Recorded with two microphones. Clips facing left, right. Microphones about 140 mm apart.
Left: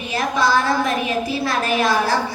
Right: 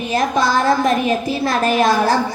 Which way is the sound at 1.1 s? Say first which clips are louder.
Right 3 dB; 45° right (ahead or behind).